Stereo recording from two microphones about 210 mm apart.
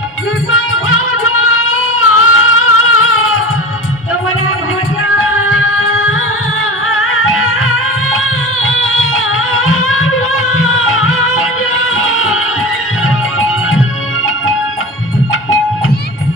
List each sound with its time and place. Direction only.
0.5 s music: 75° left (ahead or behind)
5.1 s music: 75° left (ahead or behind)